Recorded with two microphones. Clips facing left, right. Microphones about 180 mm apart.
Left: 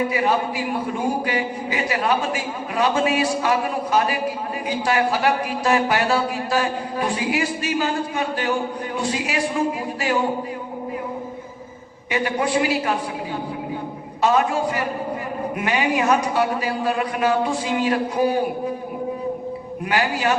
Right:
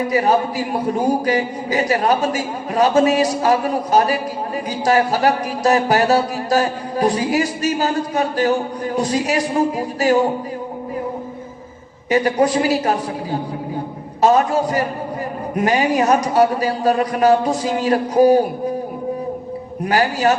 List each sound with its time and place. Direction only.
0.1 s a man's voice: 40° right (ahead or behind)
12.1 s a man's voice: 40° right (ahead or behind)
19.8 s a man's voice: 40° right (ahead or behind)